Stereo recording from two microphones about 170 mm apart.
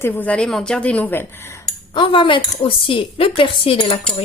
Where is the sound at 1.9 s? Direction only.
30° left (ahead or behind).